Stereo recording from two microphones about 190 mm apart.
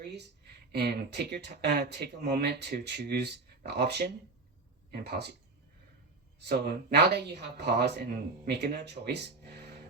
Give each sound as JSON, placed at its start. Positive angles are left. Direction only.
{"t": 0.7, "sound": "speech", "side_deg": -60}
{"t": 6.4, "sound": "speech", "side_deg": -60}